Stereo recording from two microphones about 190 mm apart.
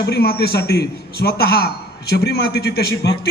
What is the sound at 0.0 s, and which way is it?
A man's voice, 55° left (ahead or behind).